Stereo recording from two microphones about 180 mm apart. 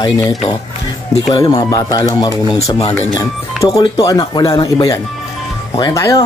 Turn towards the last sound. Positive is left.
turn(degrees=15)  # may be behind; listen again after turning